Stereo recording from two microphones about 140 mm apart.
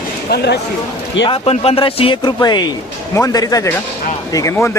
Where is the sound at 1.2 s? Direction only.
40° left (ahead or behind).